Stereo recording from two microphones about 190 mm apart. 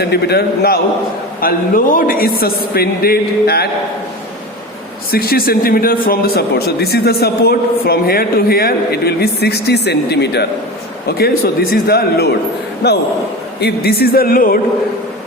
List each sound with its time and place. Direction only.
0.0 s a man's voice: 60° left (ahead or behind)
5.1 s a man's voice: 50° left (ahead or behind)